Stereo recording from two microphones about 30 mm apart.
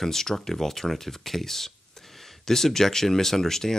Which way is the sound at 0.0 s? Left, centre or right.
Centre.